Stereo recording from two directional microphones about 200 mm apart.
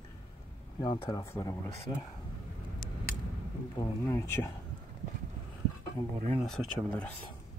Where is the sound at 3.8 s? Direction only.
15° left (ahead or behind).